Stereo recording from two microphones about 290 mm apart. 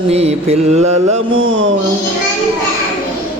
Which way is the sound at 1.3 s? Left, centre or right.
Right.